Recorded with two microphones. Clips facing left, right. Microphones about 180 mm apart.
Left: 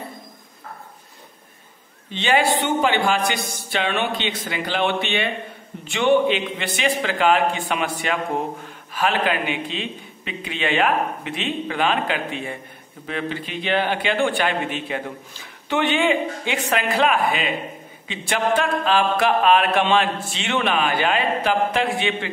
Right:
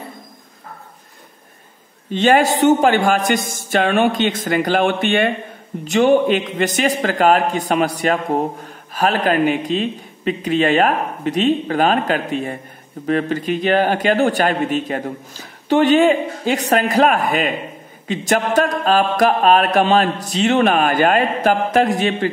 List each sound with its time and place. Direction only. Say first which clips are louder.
2.0 s a man's voice: right 6 dB; 45° right (ahead or behind)